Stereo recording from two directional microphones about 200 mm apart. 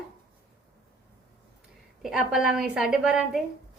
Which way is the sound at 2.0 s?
Centre (ahead or behind).